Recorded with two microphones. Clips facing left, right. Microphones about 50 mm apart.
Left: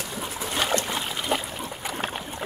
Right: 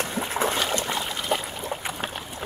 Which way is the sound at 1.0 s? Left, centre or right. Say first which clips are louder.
Even; centre.